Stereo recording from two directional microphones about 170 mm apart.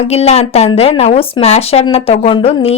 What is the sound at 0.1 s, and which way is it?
Speech, 40° left (ahead or behind).